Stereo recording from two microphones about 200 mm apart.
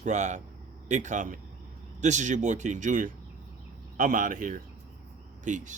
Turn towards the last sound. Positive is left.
turn(degrees=-40)  # may be behind; listen again after turning